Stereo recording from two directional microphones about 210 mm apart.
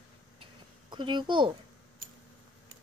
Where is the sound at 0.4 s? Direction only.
20° right (ahead or behind).